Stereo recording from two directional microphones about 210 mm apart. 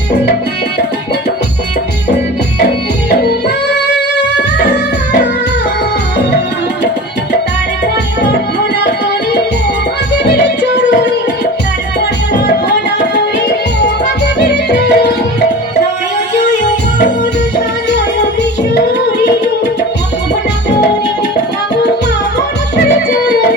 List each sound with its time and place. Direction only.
10.2 s music: 50° left (ahead or behind)
14.5 s music: 55° left (ahead or behind)